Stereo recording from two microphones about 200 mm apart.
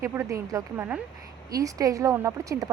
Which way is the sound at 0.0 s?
15° right (ahead or behind).